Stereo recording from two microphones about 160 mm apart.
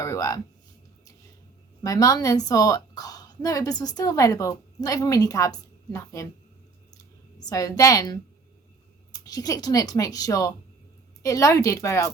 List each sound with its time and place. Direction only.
0.0 s speech: 20° left (ahead or behind)
1.8 s speech: 20° left (ahead or behind)
9.2 s speech: 25° left (ahead or behind)